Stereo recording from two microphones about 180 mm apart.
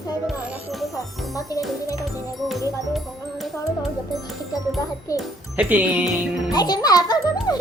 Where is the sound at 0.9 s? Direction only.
20° left (ahead or behind).